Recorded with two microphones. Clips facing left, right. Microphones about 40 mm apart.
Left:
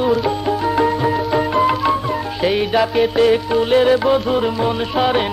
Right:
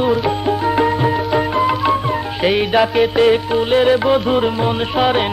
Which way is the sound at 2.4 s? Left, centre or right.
Right.